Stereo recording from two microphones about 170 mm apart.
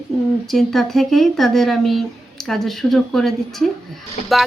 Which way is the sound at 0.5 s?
Centre (ahead or behind).